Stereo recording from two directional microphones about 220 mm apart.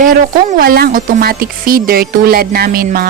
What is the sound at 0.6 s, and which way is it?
Speech, 40° right (ahead or behind).